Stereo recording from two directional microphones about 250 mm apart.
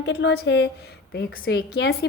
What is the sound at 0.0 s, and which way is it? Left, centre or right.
A woman's voice, left.